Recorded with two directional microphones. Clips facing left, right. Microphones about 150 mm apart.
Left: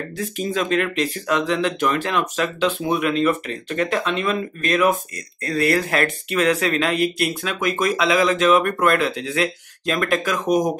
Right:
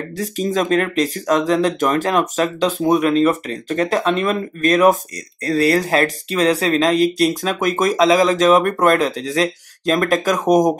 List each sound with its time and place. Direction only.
0.2 s speech: 40° right (ahead or behind)